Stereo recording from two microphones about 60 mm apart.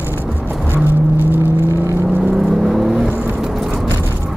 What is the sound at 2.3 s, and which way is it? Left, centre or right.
Vehicle, centre.